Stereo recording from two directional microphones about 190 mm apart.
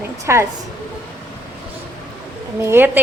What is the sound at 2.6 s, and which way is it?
Speech, 10° right (ahead or behind).